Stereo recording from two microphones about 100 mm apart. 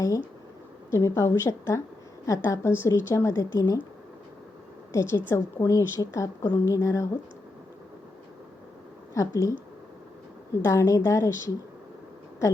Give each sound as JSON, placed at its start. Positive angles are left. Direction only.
{"t": 0.9, "sound": "a woman's voice", "side_deg": 30}
{"t": 4.9, "sound": "a woman's voice", "side_deg": 25}
{"t": 9.1, "sound": "a woman's voice", "side_deg": 30}
{"t": 10.6, "sound": "a woman's voice", "side_deg": 30}